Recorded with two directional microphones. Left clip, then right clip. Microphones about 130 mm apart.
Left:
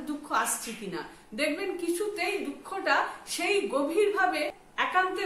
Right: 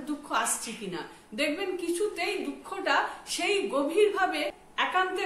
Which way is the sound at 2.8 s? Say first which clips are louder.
Even; 5° right (ahead or behind).